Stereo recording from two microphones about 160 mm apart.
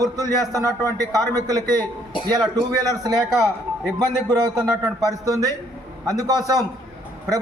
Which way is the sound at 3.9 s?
25° right (ahead or behind).